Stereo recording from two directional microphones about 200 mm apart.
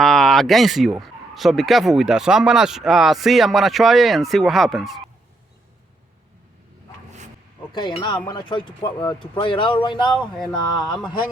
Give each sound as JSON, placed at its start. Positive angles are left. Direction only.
{"t": 0.0, "sound": "speech", "side_deg": 0}
{"t": 7.8, "sound": "speech", "side_deg": 20}
{"t": 10.8, "sound": "speech", "side_deg": 0}